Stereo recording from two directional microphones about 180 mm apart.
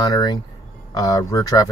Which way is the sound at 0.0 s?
20° left (ahead or behind).